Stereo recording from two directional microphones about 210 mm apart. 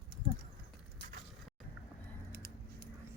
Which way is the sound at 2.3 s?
45° right (ahead or behind).